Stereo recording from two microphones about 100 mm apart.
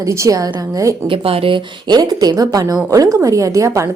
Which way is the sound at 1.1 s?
70° right (ahead or behind).